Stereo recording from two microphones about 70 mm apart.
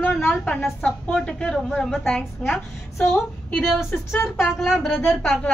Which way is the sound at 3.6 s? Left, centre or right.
Centre.